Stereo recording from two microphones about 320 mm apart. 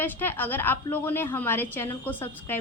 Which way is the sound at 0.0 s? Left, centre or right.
Centre.